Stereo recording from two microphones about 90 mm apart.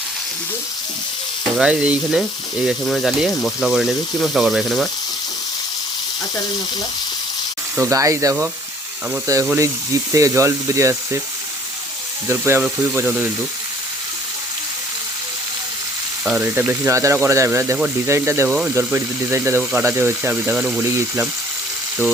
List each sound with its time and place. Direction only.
1.5 s frying: 10° right (ahead or behind)
2.6 s speech: centre (ahead or behind)
7.8 s speech: 35° right (ahead or behind)
12.3 s speech: 25° right (ahead or behind)
16.4 s speech: 20° right (ahead or behind)
16.9 s speech: 30° right (ahead or behind)
20.4 s frying: 15° right (ahead or behind)